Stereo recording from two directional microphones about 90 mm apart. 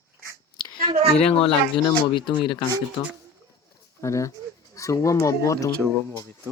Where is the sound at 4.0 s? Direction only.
35° left (ahead or behind).